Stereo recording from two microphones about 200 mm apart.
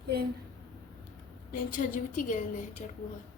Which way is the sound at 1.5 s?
40° left (ahead or behind).